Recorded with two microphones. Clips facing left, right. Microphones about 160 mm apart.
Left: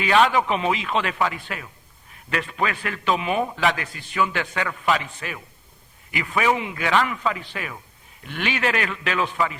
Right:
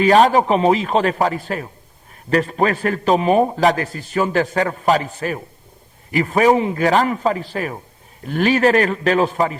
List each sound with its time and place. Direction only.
0.0 s a man's voice: 40° right (ahead or behind)